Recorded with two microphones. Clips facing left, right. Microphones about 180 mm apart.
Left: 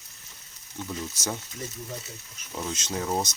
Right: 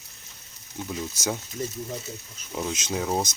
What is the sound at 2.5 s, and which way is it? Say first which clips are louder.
Speech: right 3 dB; 15° right (ahead or behind).